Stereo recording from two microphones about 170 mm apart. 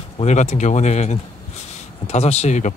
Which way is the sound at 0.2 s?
40° left (ahead or behind).